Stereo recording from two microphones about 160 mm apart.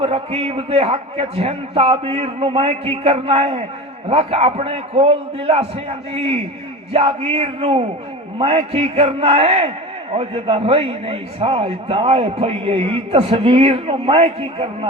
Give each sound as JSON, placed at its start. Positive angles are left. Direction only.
{"t": 0.0, "sound": "a man's voice", "side_deg": -35}